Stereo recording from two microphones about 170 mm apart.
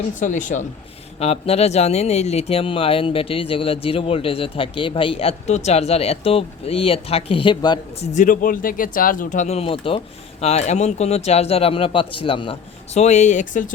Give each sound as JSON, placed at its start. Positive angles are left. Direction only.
{"t": 0.2, "sound": "speech", "side_deg": 50}
{"t": 1.2, "sound": "speech", "side_deg": 35}
{"t": 7.9, "sound": "speech", "side_deg": 40}